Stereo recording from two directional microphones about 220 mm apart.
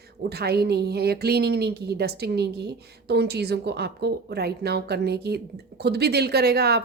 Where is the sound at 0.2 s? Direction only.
45° right (ahead or behind).